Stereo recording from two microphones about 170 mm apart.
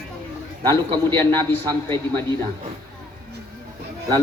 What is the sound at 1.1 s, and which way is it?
A woman's voice, 10° left (ahead or behind).